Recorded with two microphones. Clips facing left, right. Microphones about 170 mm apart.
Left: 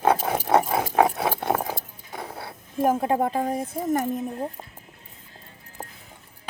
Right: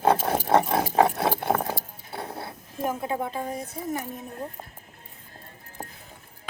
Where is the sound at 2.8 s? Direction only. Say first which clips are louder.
Left 6 dB; 50° left (ahead or behind).